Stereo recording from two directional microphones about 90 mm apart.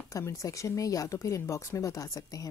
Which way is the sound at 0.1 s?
35° left (ahead or behind).